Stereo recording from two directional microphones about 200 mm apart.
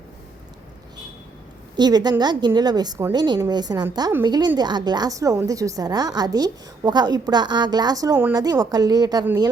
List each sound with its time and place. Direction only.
1.7 s a woman's voice: 20° right (ahead or behind)